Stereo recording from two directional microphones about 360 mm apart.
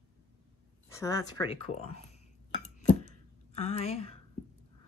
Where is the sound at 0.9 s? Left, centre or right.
Centre.